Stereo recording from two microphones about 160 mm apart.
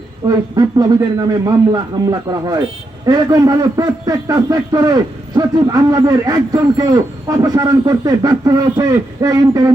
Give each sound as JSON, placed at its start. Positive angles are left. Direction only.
{"t": 0.3, "sound": "a man's voice", "side_deg": -25}